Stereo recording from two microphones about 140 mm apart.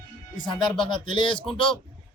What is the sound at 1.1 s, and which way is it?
Speech, 35° left (ahead or behind).